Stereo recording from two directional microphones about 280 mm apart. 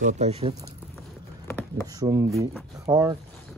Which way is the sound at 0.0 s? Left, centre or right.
Right.